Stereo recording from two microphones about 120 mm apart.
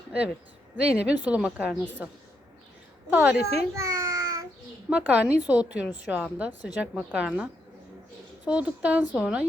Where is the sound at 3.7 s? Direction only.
25° right (ahead or behind).